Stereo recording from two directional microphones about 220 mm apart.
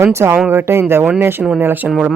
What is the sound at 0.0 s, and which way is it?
Speech, 10° right (ahead or behind).